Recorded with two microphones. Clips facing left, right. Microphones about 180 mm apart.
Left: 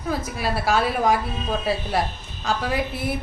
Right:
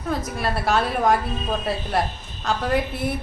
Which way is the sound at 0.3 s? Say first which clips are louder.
Even; centre (ahead or behind).